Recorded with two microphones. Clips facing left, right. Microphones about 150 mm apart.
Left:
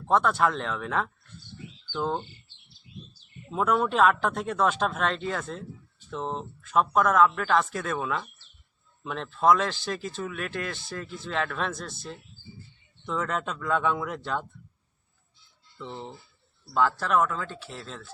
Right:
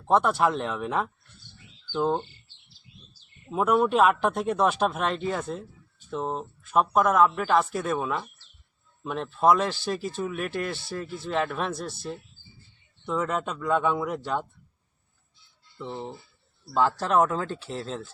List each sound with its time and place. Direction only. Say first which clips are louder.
0.0 s speech: right 1 dB; 15° right (ahead or behind)
3.5 s speech: right 3 dB; 10° right (ahead or behind)
15.8 s speech: right 3 dB; 10° right (ahead or behind)
16.7 s speech: right 1 dB; 25° right (ahead or behind)
17.2 s speech: right 4 dB; 35° right (ahead or behind)